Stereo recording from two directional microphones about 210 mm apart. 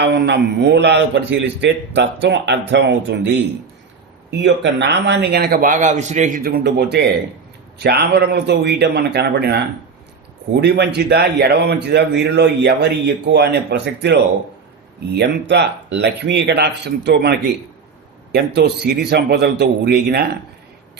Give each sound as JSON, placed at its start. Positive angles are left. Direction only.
{"t": 0.0, "sound": "a man's voice", "side_deg": -55}